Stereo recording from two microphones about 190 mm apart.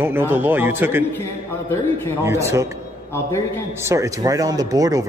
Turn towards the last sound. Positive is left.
turn(degrees=-20)  # may be behind; listen again after turning